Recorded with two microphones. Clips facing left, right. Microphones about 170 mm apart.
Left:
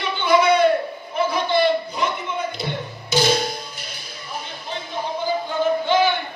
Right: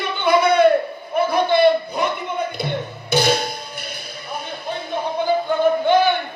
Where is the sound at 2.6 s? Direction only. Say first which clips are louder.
Right 3 dB; 60° right (ahead or behind).